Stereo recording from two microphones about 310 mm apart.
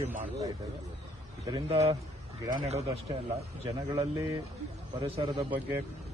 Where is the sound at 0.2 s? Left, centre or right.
Centre.